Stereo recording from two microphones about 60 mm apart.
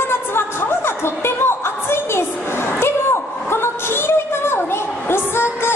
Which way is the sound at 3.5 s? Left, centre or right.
Left.